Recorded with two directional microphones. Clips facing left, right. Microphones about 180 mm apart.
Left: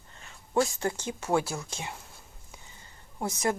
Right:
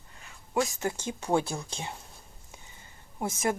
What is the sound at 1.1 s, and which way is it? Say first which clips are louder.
Speech: right 1 dB; 15° right (ahead or behind).